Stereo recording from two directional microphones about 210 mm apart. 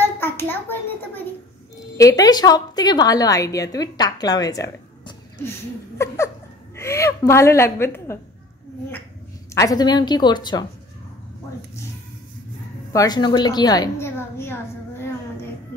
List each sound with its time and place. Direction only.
0.0 s a sound: 10° left (ahead or behind)
2.0 s a woman's voice: 15° left (ahead or behind)
9.5 s speech: 15° left (ahead or behind)
12.9 s a woman's voice: 20° left (ahead or behind)